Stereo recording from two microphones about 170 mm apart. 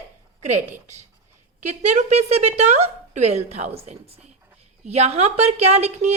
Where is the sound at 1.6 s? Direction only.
45° right (ahead or behind).